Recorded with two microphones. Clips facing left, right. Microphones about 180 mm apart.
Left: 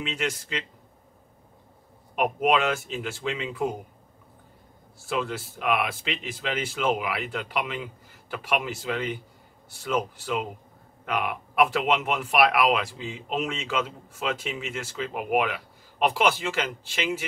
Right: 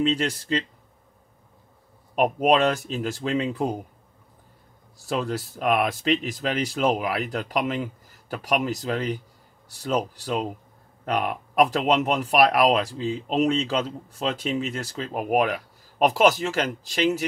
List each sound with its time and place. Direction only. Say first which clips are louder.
0.0 s speech: right 7 dB; 35° right (ahead or behind)
2.1 s speech: right 3 dB; 35° right (ahead or behind)
5.0 s speech: right 2 dB; 40° right (ahead or behind)